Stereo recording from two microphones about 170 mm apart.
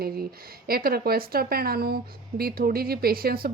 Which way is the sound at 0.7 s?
60° right (ahead or behind).